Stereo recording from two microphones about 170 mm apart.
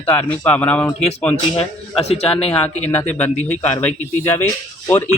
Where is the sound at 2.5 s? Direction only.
10° left (ahead or behind).